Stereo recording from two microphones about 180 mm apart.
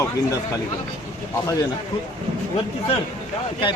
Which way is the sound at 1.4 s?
20° left (ahead or behind).